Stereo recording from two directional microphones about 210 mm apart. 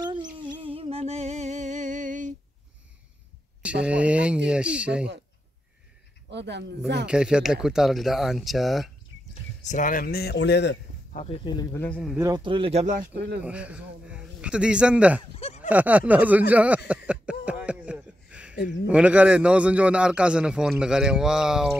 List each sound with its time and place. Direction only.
0.4 s music: 25° right (ahead or behind)
3.8 s a man's voice: 5° right (ahead or behind)
6.3 s speech: 55° right (ahead or behind)
7.1 s a man's voice: 5° right (ahead or behind)
9.3 s speech: 35° left (ahead or behind); by 10.8 s 55° left (ahead or behind)
11.1 s speech: 25° left (ahead or behind); by 12.2 s 5° left (ahead or behind)
12.2 s speech: 20° right (ahead or behind); by 13.4 s 45° right (ahead or behind)
13.4 s a man's voice: 5° right (ahead or behind)
15.3 s a sound: 30° left (ahead or behind)
15.7 s a sound: 5° right (ahead or behind)
18.9 s a man's voice: 5° right (ahead or behind)